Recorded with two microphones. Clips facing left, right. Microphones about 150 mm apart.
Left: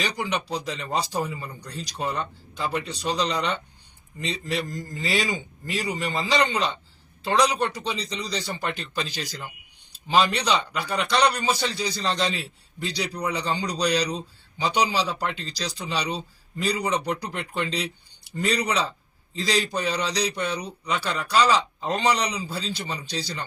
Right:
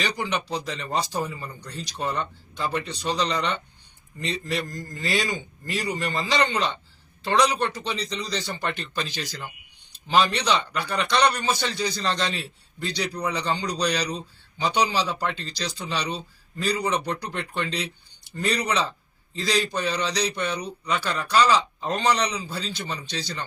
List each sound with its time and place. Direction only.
0.0 s a man's voice: centre (ahead or behind)
19.4 s a man's voice: centre (ahead or behind)